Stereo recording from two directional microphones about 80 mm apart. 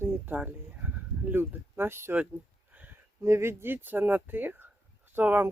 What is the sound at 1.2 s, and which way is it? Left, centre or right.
Speech, right.